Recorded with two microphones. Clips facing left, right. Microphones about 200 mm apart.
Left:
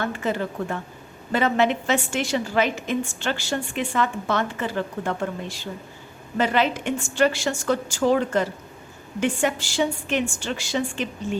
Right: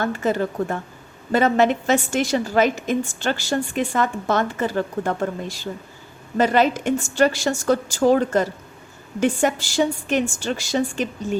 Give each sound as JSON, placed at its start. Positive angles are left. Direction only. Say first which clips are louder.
{"t": 0.0, "sound": "a woman's voice", "louder": "right 4 dB", "side_deg": -40}